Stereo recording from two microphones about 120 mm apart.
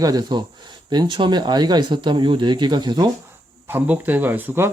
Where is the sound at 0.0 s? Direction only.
35° right (ahead or behind).